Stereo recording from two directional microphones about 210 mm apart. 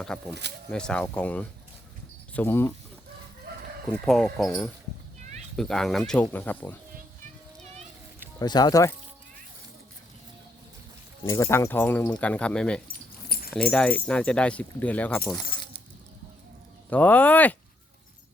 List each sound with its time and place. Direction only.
0.0 s speech: 5° left (ahead or behind)
3.5 s chicken: 50° right (ahead or behind)
4.0 s speech: centre (ahead or behind)
8.4 s speech: 20° left (ahead or behind)
11.3 s speech: 15° left (ahead or behind)
12.9 s keys jangling: 45° left (ahead or behind)
13.5 s speech: 5° left (ahead or behind)
16.9 s speech: 5° left (ahead or behind)